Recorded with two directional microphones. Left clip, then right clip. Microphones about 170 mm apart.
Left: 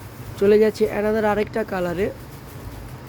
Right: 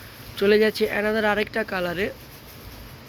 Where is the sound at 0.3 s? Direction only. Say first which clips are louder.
Left 3 dB; 5° left (ahead or behind).